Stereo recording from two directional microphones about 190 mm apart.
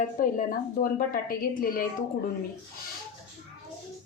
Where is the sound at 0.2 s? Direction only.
45° left (ahead or behind).